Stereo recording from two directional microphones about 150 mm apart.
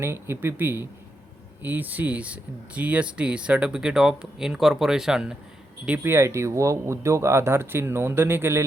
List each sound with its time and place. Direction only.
0.0 s speech: 15° right (ahead or behind)